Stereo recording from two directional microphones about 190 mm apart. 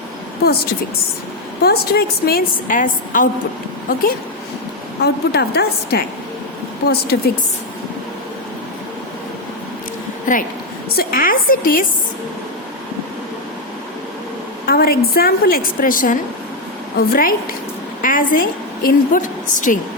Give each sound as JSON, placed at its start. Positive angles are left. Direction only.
{"t": 1.6, "sound": "a woman's voice", "side_deg": 55}
{"t": 5.0, "sound": "a woman's voice", "side_deg": 60}
{"t": 10.3, "sound": "a woman's voice", "side_deg": 45}
{"t": 14.7, "sound": "a woman's voice", "side_deg": 55}